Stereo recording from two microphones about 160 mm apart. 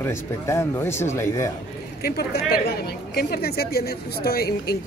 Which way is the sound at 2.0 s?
75° left (ahead or behind).